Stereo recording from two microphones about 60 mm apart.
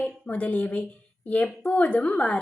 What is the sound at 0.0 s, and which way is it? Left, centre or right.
A woman's voice, left.